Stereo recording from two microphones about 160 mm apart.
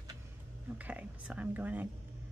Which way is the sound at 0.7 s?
10° right (ahead or behind).